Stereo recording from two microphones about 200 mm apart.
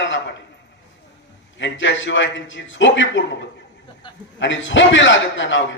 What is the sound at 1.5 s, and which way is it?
A man's voice, 65° left (ahead or behind).